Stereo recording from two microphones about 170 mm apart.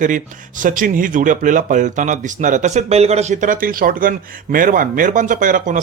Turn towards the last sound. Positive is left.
turn(degrees=-50)  # may be behind; listen again after turning